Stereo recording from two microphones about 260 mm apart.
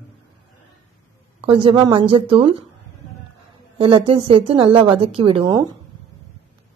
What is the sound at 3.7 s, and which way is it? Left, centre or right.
A woman's voice, right.